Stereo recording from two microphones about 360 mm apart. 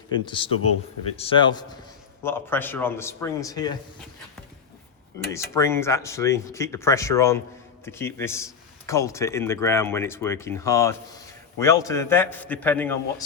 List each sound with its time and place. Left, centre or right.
0.1 s speech: centre
5.3 s speech: centre